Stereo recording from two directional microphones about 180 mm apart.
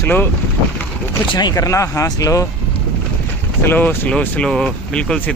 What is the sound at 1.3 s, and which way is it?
Speech, 20° left (ahead or behind).